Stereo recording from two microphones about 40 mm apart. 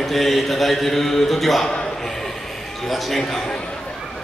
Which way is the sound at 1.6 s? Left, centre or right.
Centre.